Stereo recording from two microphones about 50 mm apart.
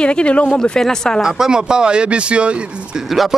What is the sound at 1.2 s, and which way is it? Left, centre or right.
Speech, centre.